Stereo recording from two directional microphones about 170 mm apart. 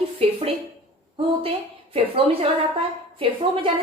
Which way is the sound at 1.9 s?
35° right (ahead or behind).